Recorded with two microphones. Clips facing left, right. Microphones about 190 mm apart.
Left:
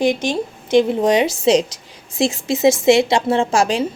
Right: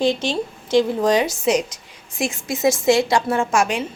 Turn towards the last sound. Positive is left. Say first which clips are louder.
# left 3 dB
turn(degrees=35)  # may be behind; listen again after turning